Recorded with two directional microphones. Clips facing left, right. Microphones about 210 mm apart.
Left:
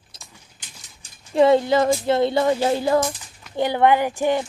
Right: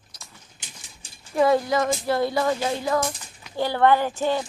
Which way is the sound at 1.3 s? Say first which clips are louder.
Left 4 dB; 25° left (ahead or behind).